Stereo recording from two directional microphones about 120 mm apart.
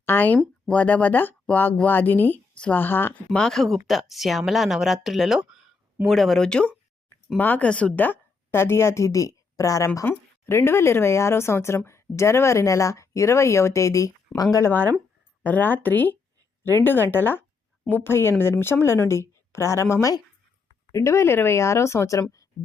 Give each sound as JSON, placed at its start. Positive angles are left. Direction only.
{"t": 0.0, "sound": "speech", "side_deg": 15}
{"t": 3.4, "sound": "a woman's voice", "side_deg": 0}